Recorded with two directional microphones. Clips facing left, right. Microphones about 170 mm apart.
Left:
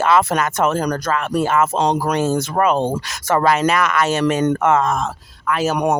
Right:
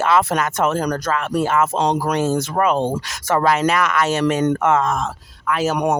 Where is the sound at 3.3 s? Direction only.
70° left (ahead or behind).